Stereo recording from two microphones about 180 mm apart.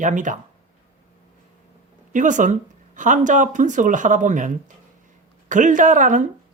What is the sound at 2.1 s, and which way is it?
Speech, 45° right (ahead or behind).